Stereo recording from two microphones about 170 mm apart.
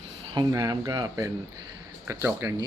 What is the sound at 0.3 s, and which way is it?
A man's voice, 20° right (ahead or behind).